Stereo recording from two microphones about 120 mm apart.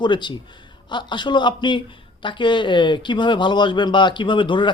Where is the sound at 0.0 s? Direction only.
40° left (ahead or behind).